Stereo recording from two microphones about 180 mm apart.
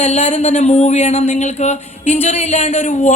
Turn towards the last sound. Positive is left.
turn(degrees=40)  # may be behind; listen again after turning